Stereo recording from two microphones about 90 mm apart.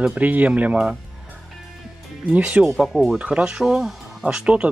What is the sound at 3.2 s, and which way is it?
Speech, 10° right (ahead or behind).